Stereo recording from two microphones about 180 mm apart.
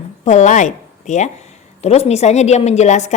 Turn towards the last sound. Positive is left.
turn(degrees=40)  # may be behind; listen again after turning